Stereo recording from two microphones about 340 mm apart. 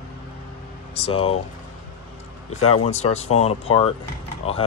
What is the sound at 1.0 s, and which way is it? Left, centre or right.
Speech, centre.